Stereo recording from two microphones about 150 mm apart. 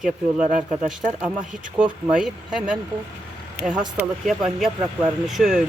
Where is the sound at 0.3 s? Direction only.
55° right (ahead or behind).